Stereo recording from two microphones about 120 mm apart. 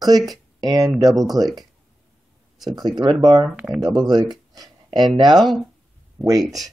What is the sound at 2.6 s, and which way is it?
Speech, centre (ahead or behind).